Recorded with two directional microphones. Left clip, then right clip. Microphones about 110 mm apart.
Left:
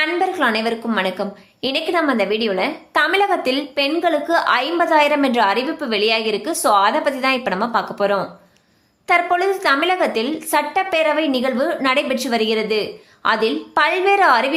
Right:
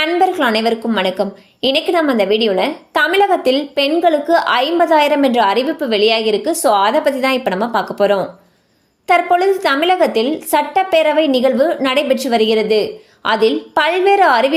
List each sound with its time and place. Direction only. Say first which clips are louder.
0.0 s a woman's voice: right 4 dB; 35° right (ahead or behind)